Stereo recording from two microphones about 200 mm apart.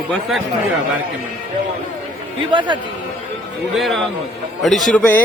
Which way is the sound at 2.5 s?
25° right (ahead or behind).